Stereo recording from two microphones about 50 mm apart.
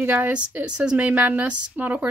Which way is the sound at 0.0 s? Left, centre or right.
Right.